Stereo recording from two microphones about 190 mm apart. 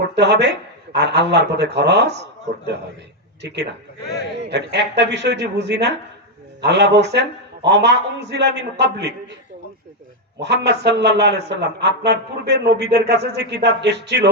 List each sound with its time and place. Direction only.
0.1 s a man's voice: 65° right (ahead or behind)
3.4 s a man's voice: 65° right (ahead or behind)
10.4 s a man's voice: 65° right (ahead or behind)